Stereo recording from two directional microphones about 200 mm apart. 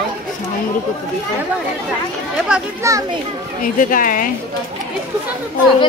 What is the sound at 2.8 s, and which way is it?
Speech, 15° right (ahead or behind).